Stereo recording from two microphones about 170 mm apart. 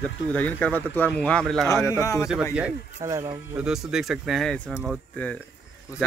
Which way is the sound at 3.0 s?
20° right (ahead or behind).